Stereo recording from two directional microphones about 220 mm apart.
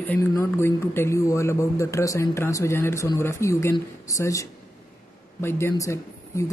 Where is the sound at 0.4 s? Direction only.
10° left (ahead or behind).